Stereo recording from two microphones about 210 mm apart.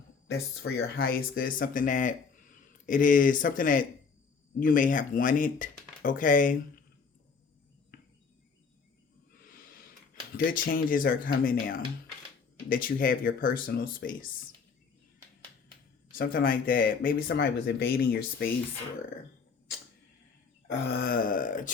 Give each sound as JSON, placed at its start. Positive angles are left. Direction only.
{"t": 0.3, "sound": "speech", "side_deg": 50}
{"t": 10.3, "sound": "speech", "side_deg": 40}
{"t": 16.1, "sound": "speech", "side_deg": 45}
{"t": 21.0, "sound": "speech", "side_deg": 45}